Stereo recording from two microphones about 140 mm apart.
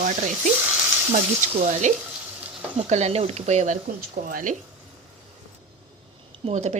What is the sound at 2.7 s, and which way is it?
Speech, 50° right (ahead or behind).